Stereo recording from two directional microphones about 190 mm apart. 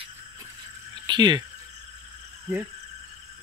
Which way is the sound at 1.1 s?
20° right (ahead or behind).